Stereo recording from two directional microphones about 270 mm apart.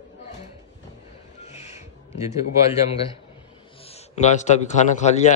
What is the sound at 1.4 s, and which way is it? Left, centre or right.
Music, left.